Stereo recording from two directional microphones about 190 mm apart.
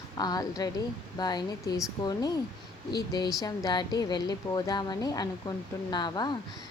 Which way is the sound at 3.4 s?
20° left (ahead or behind).